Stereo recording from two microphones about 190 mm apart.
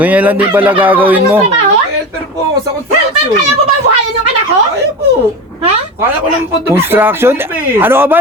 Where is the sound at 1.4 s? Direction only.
35° right (ahead or behind).